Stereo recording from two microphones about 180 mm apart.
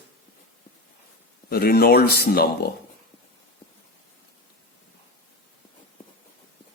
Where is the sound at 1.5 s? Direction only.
55° left (ahead or behind).